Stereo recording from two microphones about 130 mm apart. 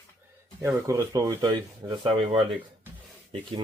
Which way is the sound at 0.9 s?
25° right (ahead or behind).